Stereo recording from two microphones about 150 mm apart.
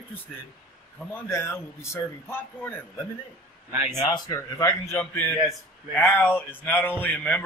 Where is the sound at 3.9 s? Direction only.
25° left (ahead or behind).